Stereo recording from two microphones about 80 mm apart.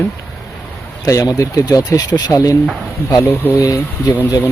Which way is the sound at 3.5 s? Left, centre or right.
Left.